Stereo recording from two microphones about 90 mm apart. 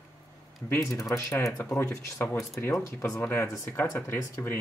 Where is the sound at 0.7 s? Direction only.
35° left (ahead or behind).